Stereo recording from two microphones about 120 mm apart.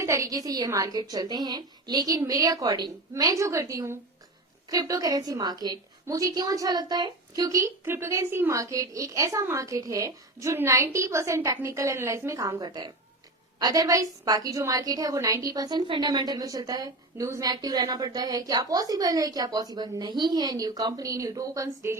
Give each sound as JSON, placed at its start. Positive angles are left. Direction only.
{"t": 0.0, "sound": "a woman's voice", "side_deg": -25}